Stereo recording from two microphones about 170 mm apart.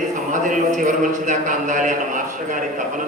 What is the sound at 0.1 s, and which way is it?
Speech, 50° right (ahead or behind).